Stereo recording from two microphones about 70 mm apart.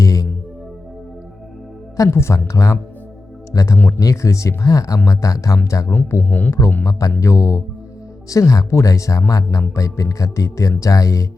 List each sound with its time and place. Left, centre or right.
0.0 s music: left
2.0 s speech: left
2.3 s speech: left
3.8 s speech: left
4.0 s speech: left
5.9 s speech: left
6.2 s speech: left
7.2 s speech: left